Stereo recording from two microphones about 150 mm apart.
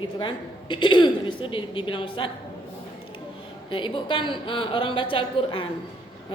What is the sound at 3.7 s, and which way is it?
A woman's voice, 35° left (ahead or behind).